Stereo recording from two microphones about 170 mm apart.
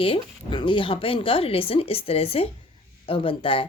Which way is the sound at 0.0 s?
30° left (ahead or behind).